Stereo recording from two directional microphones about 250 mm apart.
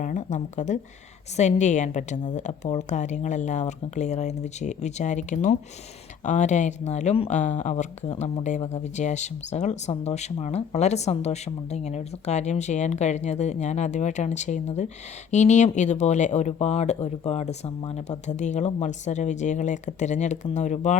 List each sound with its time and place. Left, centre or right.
0.0 s speech: left